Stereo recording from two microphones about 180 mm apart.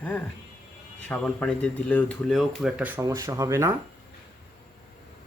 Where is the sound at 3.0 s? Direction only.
20° right (ahead or behind).